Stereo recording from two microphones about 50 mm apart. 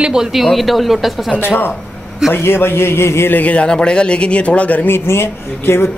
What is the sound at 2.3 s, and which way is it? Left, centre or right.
Speech, left.